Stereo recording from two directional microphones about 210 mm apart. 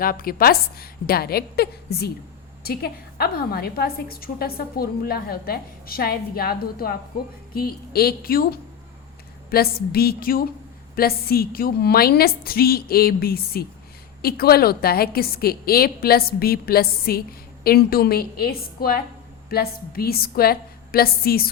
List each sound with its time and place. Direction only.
0.0 s a woman's voice: 45° left (ahead or behind)